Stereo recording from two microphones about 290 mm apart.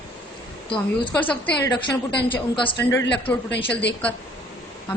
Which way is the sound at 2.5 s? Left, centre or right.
Centre.